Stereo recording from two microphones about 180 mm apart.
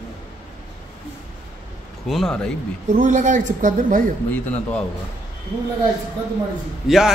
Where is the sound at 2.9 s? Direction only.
40° right (ahead or behind).